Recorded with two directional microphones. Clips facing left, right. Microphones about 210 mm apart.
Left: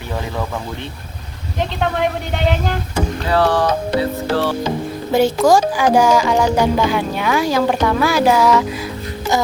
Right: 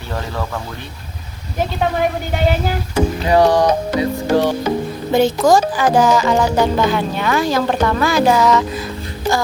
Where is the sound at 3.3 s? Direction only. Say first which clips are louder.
Right 3 dB; 15° right (ahead or behind).